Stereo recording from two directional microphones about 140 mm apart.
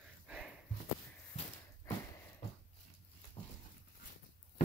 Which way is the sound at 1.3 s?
55° left (ahead or behind).